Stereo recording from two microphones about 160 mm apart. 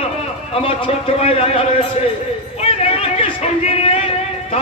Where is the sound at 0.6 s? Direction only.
35° left (ahead or behind).